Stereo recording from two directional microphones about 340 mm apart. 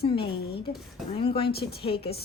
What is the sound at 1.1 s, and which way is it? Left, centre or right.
Speech, centre.